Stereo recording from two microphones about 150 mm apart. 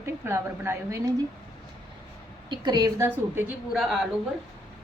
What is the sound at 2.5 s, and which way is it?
Speech, 30° right (ahead or behind).